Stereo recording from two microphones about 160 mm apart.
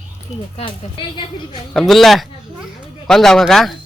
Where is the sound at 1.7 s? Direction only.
Centre (ahead or behind).